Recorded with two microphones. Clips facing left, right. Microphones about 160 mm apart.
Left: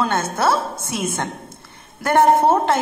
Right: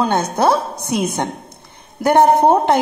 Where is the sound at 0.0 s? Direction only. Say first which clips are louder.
Right 4 dB; 15° right (ahead or behind).